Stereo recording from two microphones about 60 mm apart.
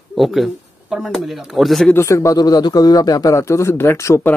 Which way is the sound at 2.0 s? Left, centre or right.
Left.